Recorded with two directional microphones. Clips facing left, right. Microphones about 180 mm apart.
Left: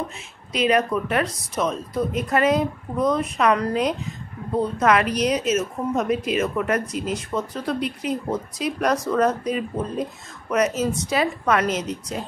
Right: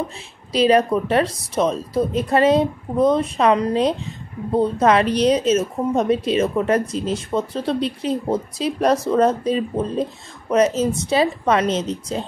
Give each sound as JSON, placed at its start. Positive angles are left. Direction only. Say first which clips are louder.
{"t": 0.5, "sound": "speech", "louder": "right 5 dB", "side_deg": -30}